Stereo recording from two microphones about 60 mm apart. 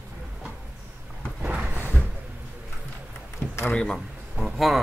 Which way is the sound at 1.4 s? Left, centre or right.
Centre.